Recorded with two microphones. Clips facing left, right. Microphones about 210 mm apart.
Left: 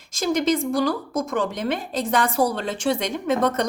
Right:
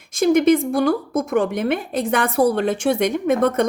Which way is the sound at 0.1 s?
60° right (ahead or behind).